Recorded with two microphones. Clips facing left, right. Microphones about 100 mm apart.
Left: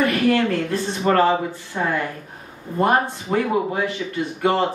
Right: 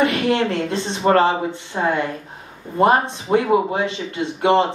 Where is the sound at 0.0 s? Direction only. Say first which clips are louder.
Even; 20° right (ahead or behind).